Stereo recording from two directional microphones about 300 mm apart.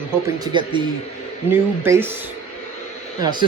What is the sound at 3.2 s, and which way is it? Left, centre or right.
Speech, centre.